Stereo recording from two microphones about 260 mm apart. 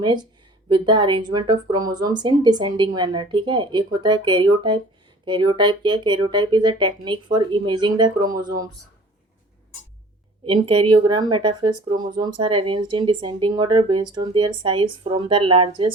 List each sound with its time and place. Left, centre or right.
0.0 s speech: centre
10.4 s speech: right